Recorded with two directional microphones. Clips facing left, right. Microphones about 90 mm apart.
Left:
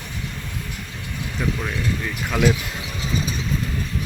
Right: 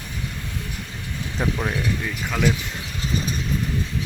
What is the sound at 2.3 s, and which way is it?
Speech, 5° left (ahead or behind).